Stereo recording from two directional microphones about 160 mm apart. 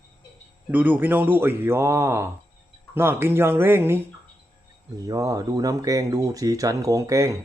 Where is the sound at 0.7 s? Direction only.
10° right (ahead or behind).